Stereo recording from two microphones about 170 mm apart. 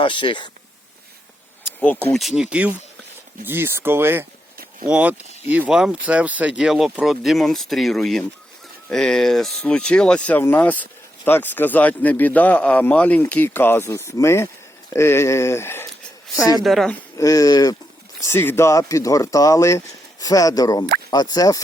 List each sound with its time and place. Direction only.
0.0 s speech: 30° left (ahead or behind)
2.1 s speech: centre (ahead or behind); by 15.9 s 15° left (ahead or behind)
16.6 s speech: centre (ahead or behind)
17.2 s speech: 20° left (ahead or behind)